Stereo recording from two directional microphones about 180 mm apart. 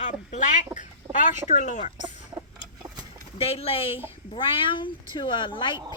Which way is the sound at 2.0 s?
40° left (ahead or behind).